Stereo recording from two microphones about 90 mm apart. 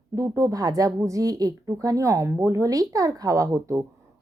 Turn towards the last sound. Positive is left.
turn(degrees=-35)  # may be behind; listen again after turning